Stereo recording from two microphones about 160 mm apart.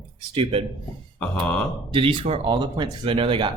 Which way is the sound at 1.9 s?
35° right (ahead or behind).